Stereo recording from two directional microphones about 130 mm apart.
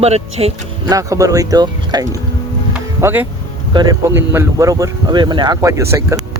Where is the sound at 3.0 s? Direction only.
15° right (ahead or behind).